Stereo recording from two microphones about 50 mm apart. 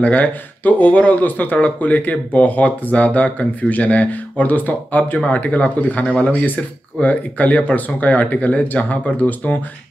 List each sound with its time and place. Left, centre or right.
0.0 s speech: left